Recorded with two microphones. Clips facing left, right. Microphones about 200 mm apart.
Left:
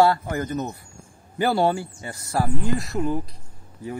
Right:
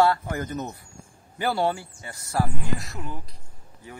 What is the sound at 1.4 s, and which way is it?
Speech, 40° left (ahead or behind).